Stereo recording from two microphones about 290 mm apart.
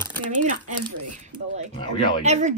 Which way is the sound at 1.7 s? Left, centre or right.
Centre.